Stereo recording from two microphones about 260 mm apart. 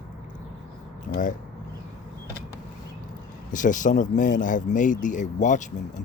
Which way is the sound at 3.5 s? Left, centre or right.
Left.